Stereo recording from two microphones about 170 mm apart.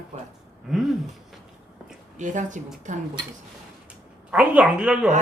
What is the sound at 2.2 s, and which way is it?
Speech, 45° right (ahead or behind).